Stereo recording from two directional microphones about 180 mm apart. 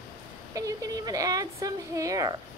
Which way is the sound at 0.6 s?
20° right (ahead or behind).